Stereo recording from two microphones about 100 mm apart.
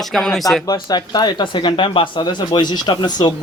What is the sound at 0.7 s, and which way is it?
Speech, 45° left (ahead or behind).